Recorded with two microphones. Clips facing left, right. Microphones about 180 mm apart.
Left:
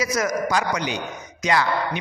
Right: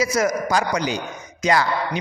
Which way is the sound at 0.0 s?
30° right (ahead or behind).